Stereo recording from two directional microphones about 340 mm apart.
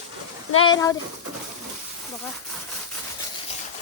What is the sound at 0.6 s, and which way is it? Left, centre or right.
Speech, centre.